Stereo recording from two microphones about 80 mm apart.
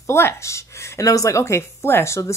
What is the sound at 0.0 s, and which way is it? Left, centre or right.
A woman's voice, left.